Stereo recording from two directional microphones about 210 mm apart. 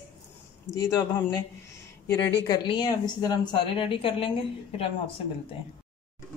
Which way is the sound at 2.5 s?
20° left (ahead or behind).